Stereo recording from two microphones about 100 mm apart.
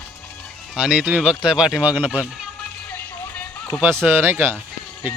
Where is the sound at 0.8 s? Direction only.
10° right (ahead or behind).